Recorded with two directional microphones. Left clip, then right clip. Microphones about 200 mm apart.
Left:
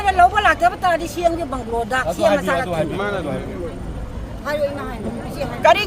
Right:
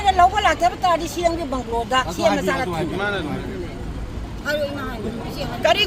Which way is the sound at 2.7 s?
60° left (ahead or behind).